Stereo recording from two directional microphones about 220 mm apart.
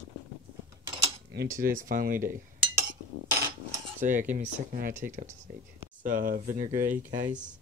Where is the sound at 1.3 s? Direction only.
45° right (ahead or behind).